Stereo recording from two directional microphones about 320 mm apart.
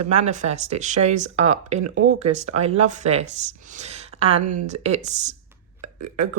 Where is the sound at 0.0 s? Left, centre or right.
Right.